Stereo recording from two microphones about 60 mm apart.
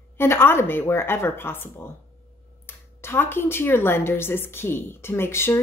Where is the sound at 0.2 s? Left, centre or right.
Left.